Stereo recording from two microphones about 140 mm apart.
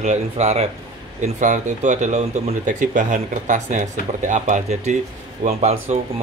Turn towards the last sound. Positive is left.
turn(degrees=-50)  # may be behind; listen again after turning